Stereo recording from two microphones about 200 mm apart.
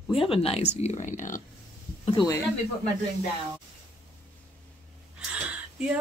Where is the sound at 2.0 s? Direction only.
25° left (ahead or behind).